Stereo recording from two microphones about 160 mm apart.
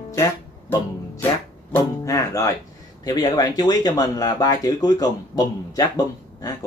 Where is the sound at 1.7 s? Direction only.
20° left (ahead or behind).